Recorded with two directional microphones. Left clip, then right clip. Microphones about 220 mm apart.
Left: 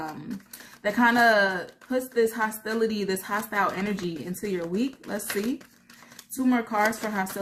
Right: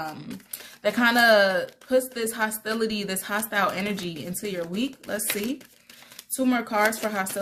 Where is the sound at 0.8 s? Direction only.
50° right (ahead or behind).